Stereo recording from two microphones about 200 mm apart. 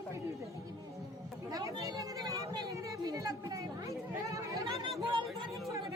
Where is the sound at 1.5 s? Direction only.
20° right (ahead or behind).